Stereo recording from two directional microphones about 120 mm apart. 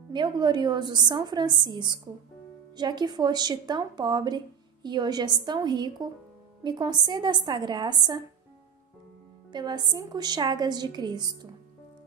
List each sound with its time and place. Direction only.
0.1 s a woman's voice: 40° right (ahead or behind)
9.5 s a woman's voice: 35° right (ahead or behind)